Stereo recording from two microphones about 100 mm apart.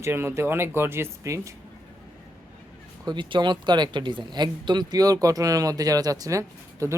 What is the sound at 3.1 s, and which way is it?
Speech, 50° right (ahead or behind).